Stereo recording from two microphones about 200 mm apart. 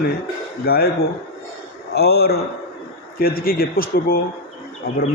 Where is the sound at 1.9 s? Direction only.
50° left (ahead or behind).